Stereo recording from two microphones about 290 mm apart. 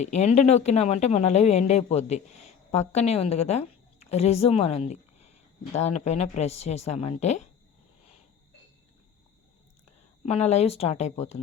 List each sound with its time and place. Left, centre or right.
0.0 s speech: left
10.2 s speech: left